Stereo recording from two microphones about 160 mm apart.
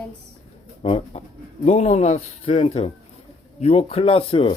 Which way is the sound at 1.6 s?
45° left (ahead or behind).